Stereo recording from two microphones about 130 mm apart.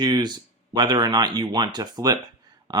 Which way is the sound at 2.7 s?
30° right (ahead or behind).